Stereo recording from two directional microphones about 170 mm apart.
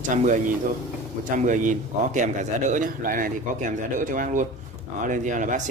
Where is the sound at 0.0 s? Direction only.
50° right (ahead or behind).